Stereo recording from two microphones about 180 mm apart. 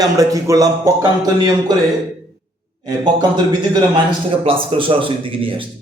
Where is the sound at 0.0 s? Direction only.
20° right (ahead or behind).